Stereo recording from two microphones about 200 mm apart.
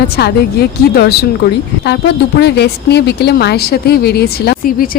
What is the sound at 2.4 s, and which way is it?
Speech, 55° left (ahead or behind).